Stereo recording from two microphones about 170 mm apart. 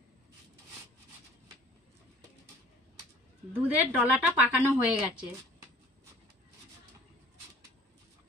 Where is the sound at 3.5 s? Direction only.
10° right (ahead or behind).